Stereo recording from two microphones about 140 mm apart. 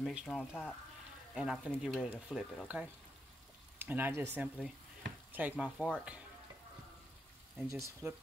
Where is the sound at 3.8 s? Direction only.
15° right (ahead or behind).